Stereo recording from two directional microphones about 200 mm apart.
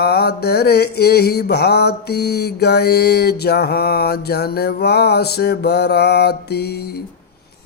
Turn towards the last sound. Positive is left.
turn(degrees=50)  # may be behind; listen again after turning